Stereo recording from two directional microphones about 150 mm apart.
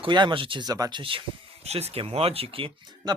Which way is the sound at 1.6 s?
45° right (ahead or behind).